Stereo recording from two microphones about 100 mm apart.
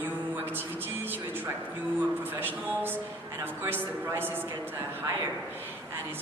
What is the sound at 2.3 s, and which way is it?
A woman's voice, 20° right (ahead or behind).